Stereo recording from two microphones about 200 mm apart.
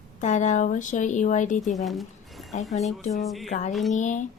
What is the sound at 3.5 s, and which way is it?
Speech, 35° left (ahead or behind).